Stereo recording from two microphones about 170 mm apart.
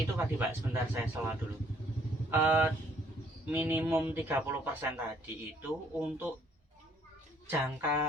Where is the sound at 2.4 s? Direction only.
10° right (ahead or behind).